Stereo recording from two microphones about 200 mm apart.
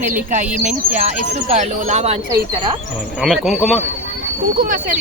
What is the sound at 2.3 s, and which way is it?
Speech, 20° right (ahead or behind).